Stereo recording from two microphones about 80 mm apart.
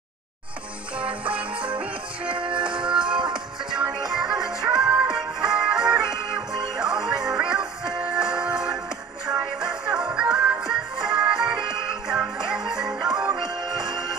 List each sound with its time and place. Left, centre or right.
0.9 s music: centre
2.3 s music: right
2.6 s music: centre
12.8 s music: right
13.4 s music: centre